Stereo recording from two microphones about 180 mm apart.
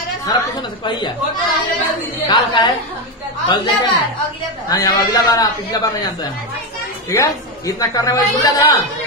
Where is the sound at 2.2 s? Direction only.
25° left (ahead or behind).